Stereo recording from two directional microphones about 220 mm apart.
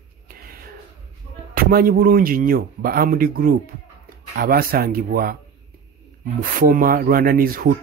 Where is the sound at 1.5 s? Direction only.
40° right (ahead or behind).